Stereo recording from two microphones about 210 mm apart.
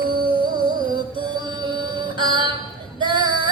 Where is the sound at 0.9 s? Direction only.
20° right (ahead or behind).